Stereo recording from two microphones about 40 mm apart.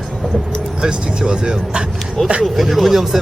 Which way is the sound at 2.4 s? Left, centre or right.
Centre.